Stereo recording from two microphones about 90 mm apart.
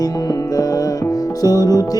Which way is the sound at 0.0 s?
45° left (ahead or behind).